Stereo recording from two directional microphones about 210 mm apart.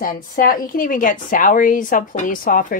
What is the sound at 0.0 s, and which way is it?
A woman's voice, 40° left (ahead or behind).